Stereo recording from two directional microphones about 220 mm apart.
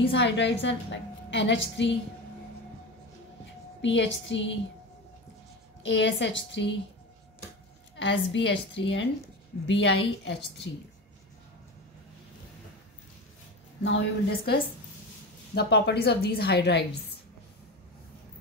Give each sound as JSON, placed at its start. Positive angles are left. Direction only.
{"t": 0.1, "sound": "a woman's voice", "side_deg": 55}
{"t": 3.8, "sound": "a woman's voice", "side_deg": 55}
{"t": 5.8, "sound": "a woman's voice", "side_deg": 55}
{"t": 7.9, "sound": "a woman's voice", "side_deg": 55}
{"t": 13.8, "sound": "a woman's voice", "side_deg": 50}